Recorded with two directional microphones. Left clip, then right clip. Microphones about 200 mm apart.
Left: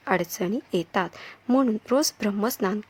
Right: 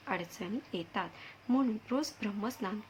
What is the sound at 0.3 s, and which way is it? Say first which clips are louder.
A woman's voice: left 12 dB; 50° left (ahead or behind).